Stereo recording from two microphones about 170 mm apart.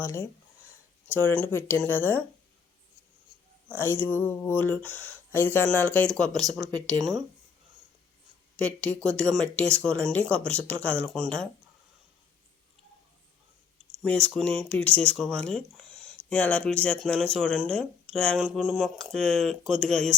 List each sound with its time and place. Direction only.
0.0 s speech: 15° left (ahead or behind)
3.8 s speech: 15° left (ahead or behind)
6.7 s speech: 20° right (ahead or behind)
8.6 s speech: 5° left (ahead or behind)
14.0 s speech: 5° left (ahead or behind)